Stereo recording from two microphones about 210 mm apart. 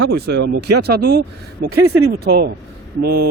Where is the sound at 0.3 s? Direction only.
50° right (ahead or behind).